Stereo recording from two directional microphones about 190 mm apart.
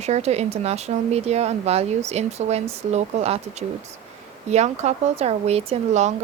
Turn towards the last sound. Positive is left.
turn(degrees=-35)  # may be behind; listen again after turning